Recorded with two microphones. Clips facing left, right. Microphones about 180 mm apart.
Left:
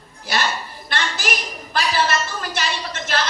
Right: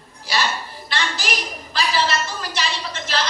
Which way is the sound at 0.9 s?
50° left (ahead or behind).